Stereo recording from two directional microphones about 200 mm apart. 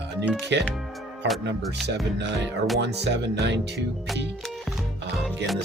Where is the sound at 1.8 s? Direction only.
55° right (ahead or behind).